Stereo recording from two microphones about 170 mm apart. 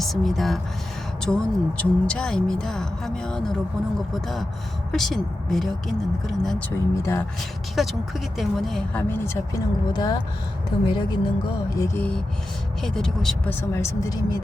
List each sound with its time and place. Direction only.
0.0 s a woman's voice: centre (ahead or behind)
6.7 s a woman's voice: 15° left (ahead or behind)
7.8 s a woman's voice: centre (ahead or behind); by 10.2 s 25° left (ahead or behind)
10.9 s music: 25° left (ahead or behind)
11.9 s a woman's voice: 5° left (ahead or behind)